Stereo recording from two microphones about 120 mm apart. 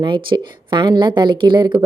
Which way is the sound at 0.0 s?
40° right (ahead or behind).